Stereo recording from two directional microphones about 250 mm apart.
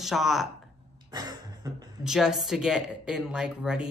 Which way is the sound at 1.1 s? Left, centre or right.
Centre.